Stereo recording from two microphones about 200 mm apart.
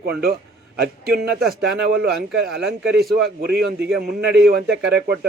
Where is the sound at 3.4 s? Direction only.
50° right (ahead or behind).